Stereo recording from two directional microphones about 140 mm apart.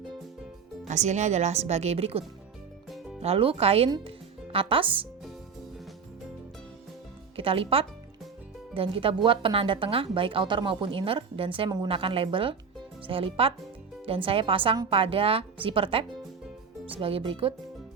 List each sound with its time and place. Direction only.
0.9 s speech: 55° right (ahead or behind); by 5.0 s 40° right (ahead or behind)
7.3 s speech: 40° right (ahead or behind)